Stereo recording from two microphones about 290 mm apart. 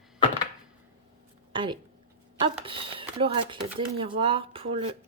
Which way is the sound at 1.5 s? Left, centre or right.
Centre.